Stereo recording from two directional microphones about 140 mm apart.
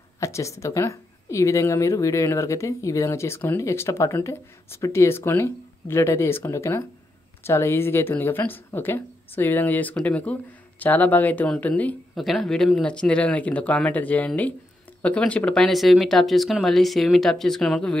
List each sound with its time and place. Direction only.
0.2 s speech: 20° left (ahead or behind); by 17.9 s 5° left (ahead or behind)